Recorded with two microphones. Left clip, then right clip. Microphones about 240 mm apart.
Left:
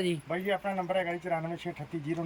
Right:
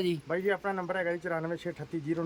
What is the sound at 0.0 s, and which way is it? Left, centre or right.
Speech, centre.